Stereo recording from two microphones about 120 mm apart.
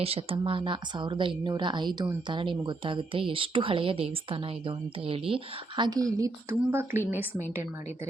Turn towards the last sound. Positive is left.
turn(degrees=-15)  # may be behind; listen again after turning